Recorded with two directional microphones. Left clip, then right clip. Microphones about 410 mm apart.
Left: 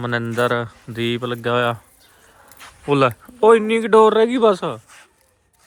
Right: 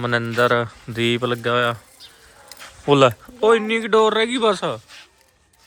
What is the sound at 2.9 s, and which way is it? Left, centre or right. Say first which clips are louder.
Speech: right 2 dB; centre.